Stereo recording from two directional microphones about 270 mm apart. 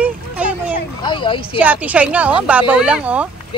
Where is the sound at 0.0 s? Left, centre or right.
Centre.